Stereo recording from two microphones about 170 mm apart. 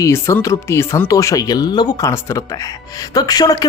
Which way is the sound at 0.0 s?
15° left (ahead or behind).